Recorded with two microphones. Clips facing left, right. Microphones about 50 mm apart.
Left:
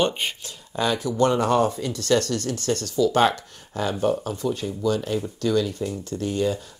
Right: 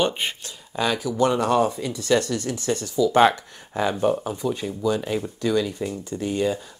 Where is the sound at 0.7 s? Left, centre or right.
Centre.